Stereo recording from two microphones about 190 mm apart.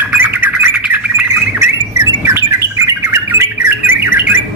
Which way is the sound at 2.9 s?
15° right (ahead or behind).